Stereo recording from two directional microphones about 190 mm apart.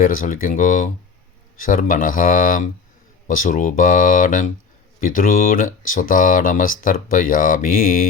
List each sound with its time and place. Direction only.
0.0 s speech: 45° left (ahead or behind)